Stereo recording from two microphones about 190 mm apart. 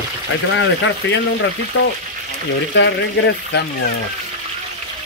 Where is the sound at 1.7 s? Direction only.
80° left.